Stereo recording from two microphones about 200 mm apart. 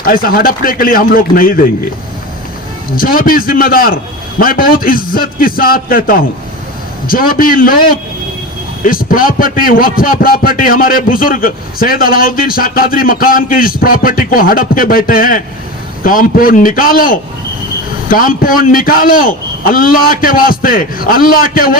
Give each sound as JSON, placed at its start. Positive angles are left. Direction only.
{"t": 0.0, "sound": "a man's voice", "side_deg": 45}
{"t": 2.9, "sound": "a man's voice", "side_deg": 45}
{"t": 8.8, "sound": "a man's voice", "side_deg": 45}